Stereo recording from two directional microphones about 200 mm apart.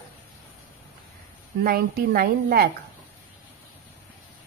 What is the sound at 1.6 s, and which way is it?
A woman's voice, 50° right (ahead or behind).